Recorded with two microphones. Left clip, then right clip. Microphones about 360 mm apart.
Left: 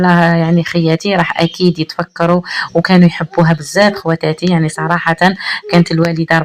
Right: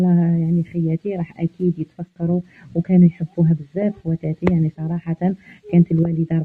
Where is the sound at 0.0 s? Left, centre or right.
Left.